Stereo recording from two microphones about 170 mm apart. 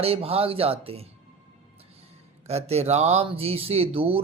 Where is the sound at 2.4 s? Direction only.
40° right (ahead or behind).